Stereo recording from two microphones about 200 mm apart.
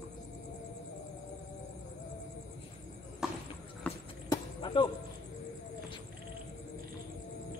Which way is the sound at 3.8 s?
5° left (ahead or behind).